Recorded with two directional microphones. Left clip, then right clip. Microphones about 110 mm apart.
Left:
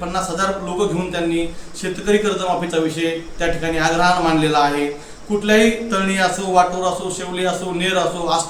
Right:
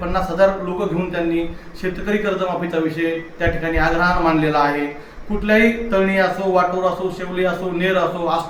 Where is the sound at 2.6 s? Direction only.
15° left (ahead or behind).